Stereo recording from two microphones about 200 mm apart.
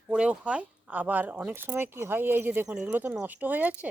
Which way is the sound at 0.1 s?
5° right (ahead or behind).